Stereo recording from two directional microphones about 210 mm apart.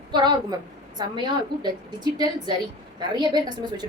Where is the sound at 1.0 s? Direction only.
20° right (ahead or behind).